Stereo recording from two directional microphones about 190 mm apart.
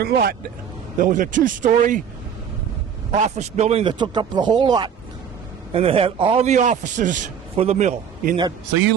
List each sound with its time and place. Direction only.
0.0 s speech: 50° right (ahead or behind)
3.2 s a man's voice: 35° right (ahead or behind)